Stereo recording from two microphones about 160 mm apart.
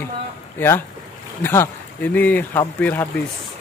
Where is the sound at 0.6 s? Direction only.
15° left (ahead or behind).